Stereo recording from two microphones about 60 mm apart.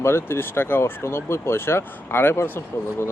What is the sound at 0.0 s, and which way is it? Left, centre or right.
Speech, left.